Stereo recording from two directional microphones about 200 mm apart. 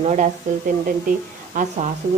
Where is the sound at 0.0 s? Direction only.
35° right (ahead or behind).